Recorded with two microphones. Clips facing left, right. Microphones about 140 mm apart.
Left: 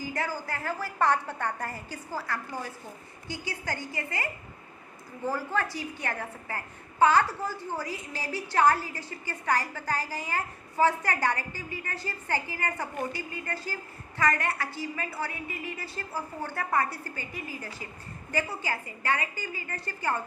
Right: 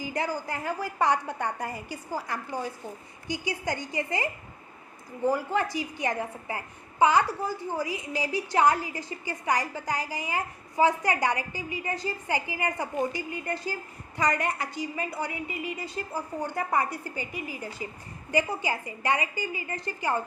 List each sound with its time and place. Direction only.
0.0 s a woman's voice: 15° right (ahead or behind)